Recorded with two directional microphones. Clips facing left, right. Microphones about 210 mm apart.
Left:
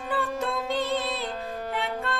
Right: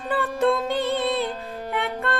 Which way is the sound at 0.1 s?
60° right (ahead or behind).